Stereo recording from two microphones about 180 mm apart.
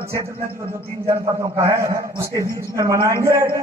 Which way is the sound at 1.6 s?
15° right (ahead or behind).